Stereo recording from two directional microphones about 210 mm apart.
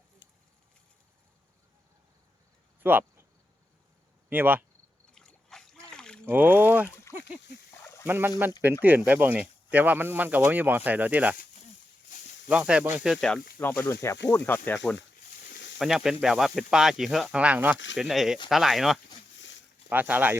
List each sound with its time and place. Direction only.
2.8 s a sound: 10° right (ahead or behind)
4.3 s speech: 10° right (ahead or behind)
5.1 s boat: centre (ahead or behind)
6.3 s speech: 10° right (ahead or behind)
8.0 s speech: 10° right (ahead or behind)
12.5 s speech: 5° right (ahead or behind)
15.4 s snake: 55° left (ahead or behind)
15.8 s speech: centre (ahead or behind)
19.4 s a sound: 60° left (ahead or behind)
19.9 s speech: 10° right (ahead or behind)